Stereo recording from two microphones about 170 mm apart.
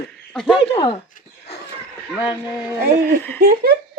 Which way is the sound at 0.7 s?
25° left (ahead or behind).